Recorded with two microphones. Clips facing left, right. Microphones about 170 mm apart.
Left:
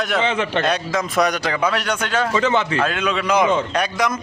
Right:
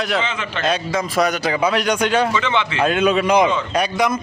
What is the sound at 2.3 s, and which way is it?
Speech, 40° left (ahead or behind).